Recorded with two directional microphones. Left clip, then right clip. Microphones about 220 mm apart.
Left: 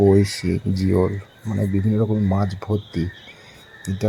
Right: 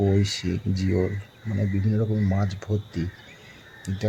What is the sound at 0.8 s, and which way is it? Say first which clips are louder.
Speech: left 6 dB; 15° left (ahead or behind).